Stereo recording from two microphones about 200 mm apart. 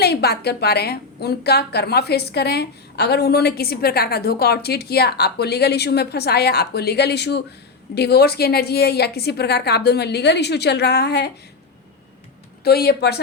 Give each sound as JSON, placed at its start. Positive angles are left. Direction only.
{"t": 0.0, "sound": "a woman's voice", "side_deg": 55}
{"t": 12.6, "sound": "a woman's voice", "side_deg": 50}